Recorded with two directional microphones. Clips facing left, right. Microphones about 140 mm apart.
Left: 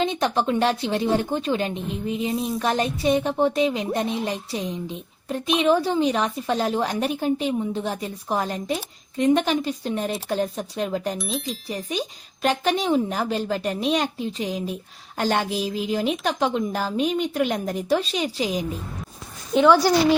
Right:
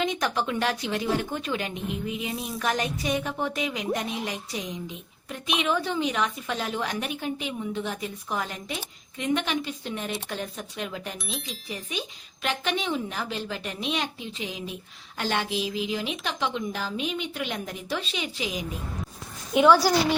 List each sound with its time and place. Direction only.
0.0 s a woman's voice: 30° left (ahead or behind)
11.2 s speech: centre (ahead or behind)
11.7 s a woman's voice: 40° left (ahead or behind)
19.5 s a woman's voice: 10° right (ahead or behind)